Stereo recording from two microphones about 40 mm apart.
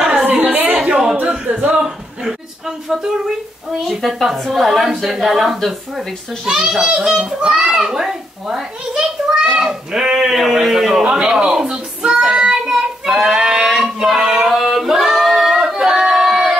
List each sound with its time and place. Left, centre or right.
0.3 s a sound: right
1.2 s singing: right
3.8 s a child's voice: centre
6.4 s a child's voice: centre
12.0 s child singing: right
14.5 s singing: centre